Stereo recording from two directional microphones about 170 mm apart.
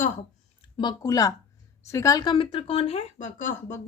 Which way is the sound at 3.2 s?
50° left (ahead or behind).